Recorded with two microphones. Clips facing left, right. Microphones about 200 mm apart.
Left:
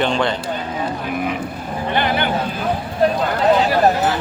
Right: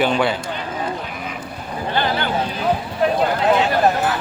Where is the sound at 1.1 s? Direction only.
55° left (ahead or behind).